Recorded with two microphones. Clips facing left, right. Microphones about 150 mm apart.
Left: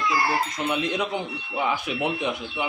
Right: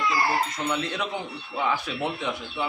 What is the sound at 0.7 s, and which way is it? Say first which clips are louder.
Speech: left 3 dB; 20° left (ahead or behind).